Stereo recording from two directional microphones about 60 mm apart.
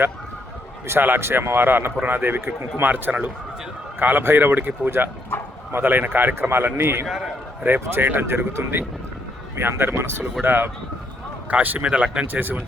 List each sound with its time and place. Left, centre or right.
0.9 s a man's voice: right
11.9 s speech: centre
12.2 s a man's voice: right